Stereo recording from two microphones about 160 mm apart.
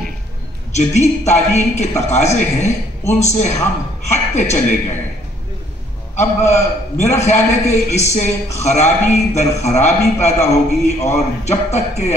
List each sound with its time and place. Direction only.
0.7 s a man's voice: 45° left (ahead or behind)
6.1 s a man's voice: 45° left (ahead or behind)